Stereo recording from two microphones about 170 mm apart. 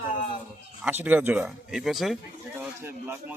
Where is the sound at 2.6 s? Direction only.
10° right (ahead or behind).